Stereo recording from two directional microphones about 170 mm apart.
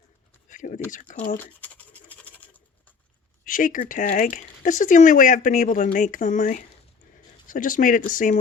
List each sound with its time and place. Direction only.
0.4 s a sound: 50° left (ahead or behind)
1.1 s speech: 50° left (ahead or behind)
1.6 s scratch: 10° left (ahead or behind)
3.4 s speech: 55° left (ahead or behind)